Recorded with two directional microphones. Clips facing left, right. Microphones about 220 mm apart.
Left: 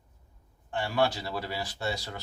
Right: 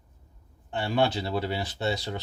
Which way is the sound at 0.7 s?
25° right (ahead or behind).